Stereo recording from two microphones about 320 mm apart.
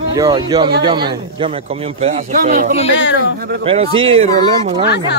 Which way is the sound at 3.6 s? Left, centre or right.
Centre.